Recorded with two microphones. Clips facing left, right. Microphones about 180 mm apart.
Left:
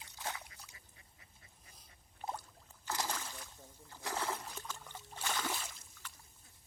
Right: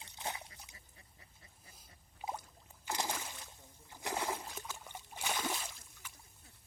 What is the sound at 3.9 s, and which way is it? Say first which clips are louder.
Splash: right 1 dB; 15° right (ahead or behind).